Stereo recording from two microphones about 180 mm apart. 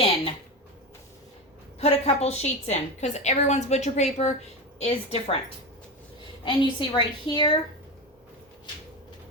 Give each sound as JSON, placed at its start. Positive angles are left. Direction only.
{"t": 1.8, "sound": "a woman's voice", "side_deg": 35}
{"t": 6.4, "sound": "a woman's voice", "side_deg": 25}